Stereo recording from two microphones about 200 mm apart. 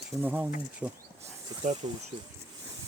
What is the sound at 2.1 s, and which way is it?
Speech, 25° right (ahead or behind).